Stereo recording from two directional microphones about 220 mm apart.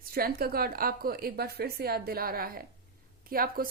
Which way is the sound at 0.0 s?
45° right (ahead or behind).